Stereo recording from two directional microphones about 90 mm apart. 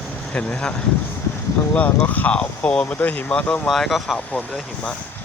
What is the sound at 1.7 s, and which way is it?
Speech, 15° left (ahead or behind).